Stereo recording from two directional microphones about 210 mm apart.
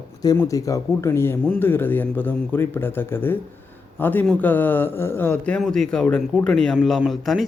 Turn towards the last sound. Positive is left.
turn(degrees=0)  # may be behind; listen again after turning